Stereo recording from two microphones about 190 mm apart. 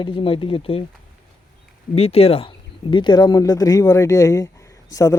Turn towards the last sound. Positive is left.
turn(degrees=15)  # may be behind; listen again after turning